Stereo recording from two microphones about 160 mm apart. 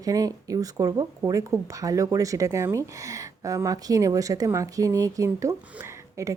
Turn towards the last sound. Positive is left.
turn(degrees=-20)  # may be behind; listen again after turning